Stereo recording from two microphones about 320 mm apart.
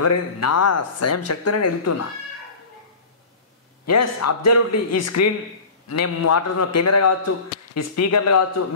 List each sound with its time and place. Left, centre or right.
0.0 s a man's voice: left
3.8 s a man's voice: left